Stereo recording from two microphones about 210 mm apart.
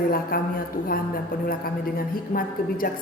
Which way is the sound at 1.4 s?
45° left (ahead or behind).